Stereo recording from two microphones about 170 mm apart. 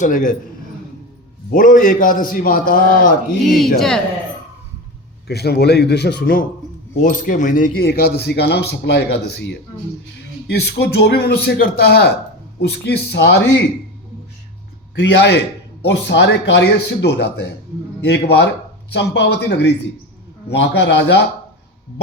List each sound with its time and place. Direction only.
0.0 s a man's voice: 50° left (ahead or behind)
1.5 s a man's voice: 55° left (ahead or behind)
3.4 s speech: centre (ahead or behind)
5.3 s speech: 70° left (ahead or behind)
7.0 s a man's voice: 50° left (ahead or behind)
7.9 s speech: 65° left (ahead or behind); by 9.6 s 90° left
10.4 s speech: 75° left (ahead or behind); by 13.7 s 90° left
14.9 s a man's voice: 90° left